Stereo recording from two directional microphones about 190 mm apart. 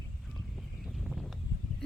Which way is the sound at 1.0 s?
Centre (ahead or behind).